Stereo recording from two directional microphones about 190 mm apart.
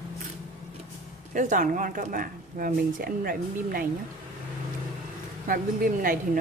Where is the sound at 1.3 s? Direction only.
45° right (ahead or behind).